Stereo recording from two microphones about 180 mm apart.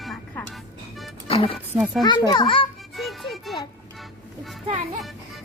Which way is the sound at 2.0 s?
25° left (ahead or behind).